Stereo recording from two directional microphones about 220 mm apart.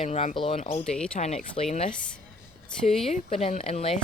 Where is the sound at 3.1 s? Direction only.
30° left (ahead or behind).